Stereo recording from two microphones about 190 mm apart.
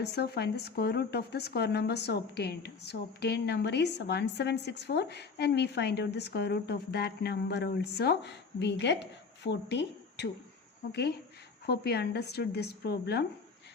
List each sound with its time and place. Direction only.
0.0 s speech: 60° left (ahead or behind)
11.6 s speech: 60° left (ahead or behind)